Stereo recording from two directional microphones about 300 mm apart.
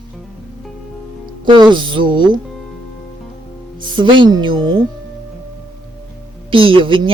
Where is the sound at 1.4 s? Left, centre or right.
Centre.